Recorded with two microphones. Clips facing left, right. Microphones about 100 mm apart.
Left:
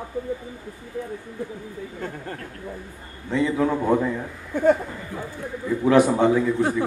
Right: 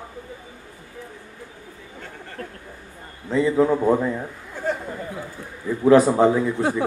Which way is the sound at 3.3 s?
30° right (ahead or behind).